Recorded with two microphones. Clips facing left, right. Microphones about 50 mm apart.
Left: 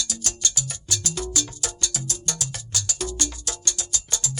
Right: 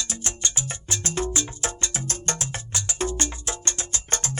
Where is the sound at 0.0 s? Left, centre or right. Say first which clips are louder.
Even; right.